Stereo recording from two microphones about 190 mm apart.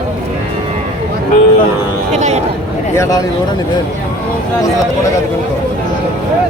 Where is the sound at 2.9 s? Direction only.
15° left (ahead or behind).